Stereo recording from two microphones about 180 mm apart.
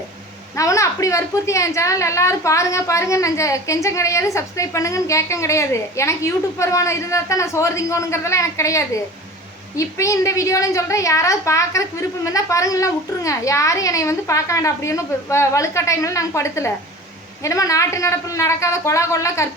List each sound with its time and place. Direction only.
0.5 s a woman's voice: 15° left (ahead or behind)